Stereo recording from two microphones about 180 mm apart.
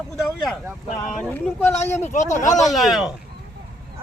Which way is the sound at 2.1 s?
45° left (ahead or behind).